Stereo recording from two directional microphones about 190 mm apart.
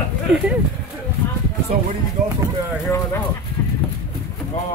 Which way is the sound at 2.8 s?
10° left (ahead or behind).